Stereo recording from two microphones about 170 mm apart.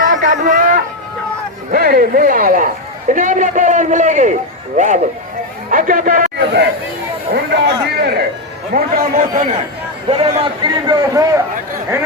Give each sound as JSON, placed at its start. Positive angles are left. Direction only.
{"t": 0.1, "sound": "a sound", "side_deg": -50}
{"t": 1.7, "sound": "a man's voice", "side_deg": -55}
{"t": 6.4, "sound": "chatter", "side_deg": -75}
{"t": 7.5, "sound": "speech", "side_deg": -70}
{"t": 8.7, "sound": "a man's voice", "side_deg": -55}
{"t": 10.1, "sound": "a man's voice", "side_deg": -35}